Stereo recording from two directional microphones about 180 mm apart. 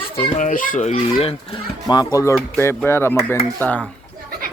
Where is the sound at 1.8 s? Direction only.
20° left (ahead or behind).